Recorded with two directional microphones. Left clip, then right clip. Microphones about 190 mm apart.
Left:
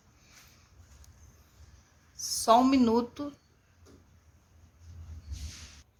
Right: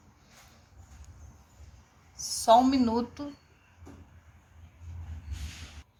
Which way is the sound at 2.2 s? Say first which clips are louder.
Right 2 dB; 35° left (ahead or behind).